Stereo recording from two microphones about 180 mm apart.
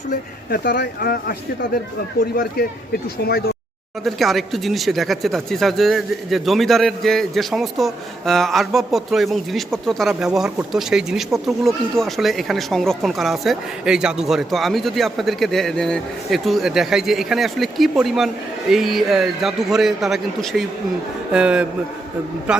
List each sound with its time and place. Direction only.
0.1 s speech: 60° left (ahead or behind)
4.0 s speech: centre (ahead or behind)